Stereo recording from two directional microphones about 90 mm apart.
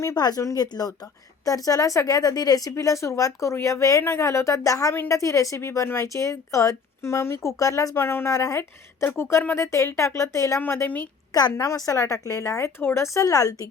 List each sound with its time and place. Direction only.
0.2 s speech: 45° left (ahead or behind)
7.9 s a woman's voice: 25° left (ahead or behind)
10.6 s a woman's voice: 25° left (ahead or behind)
11.5 s speech: 35° left (ahead or behind)